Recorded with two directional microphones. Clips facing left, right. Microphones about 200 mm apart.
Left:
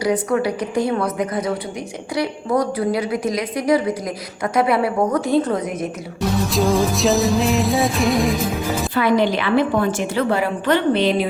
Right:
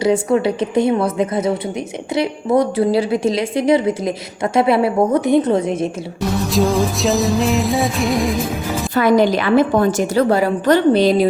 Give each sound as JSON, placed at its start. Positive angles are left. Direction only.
{"t": 0.0, "sound": "a woman's voice", "side_deg": -25}
{"t": 6.5, "sound": "music", "side_deg": 0}
{"t": 9.0, "sound": "a woman's voice", "side_deg": -40}